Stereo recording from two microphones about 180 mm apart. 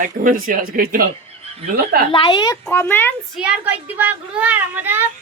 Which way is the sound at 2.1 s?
25° left (ahead or behind).